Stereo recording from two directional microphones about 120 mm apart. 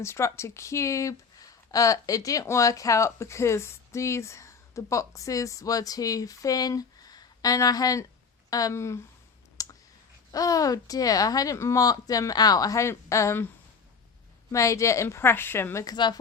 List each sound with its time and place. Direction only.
0.0 s speech: 25° left (ahead or behind)
9.6 s clicking: 30° left (ahead or behind)
10.3 s speech: 30° left (ahead or behind)
14.5 s speech: 25° left (ahead or behind)